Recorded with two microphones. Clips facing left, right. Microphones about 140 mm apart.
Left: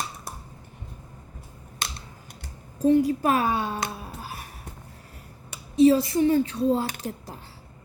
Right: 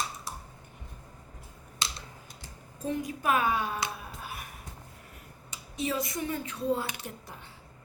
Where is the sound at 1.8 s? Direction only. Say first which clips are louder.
Left 2 dB; 60° left (ahead or behind).